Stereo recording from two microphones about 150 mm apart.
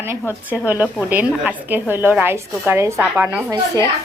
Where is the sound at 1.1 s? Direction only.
10° right (ahead or behind).